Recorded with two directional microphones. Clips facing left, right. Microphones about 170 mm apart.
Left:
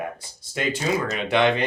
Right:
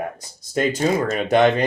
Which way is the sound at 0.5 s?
45° right (ahead or behind).